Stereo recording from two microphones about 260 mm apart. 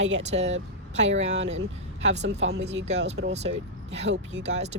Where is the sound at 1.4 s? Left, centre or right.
Right.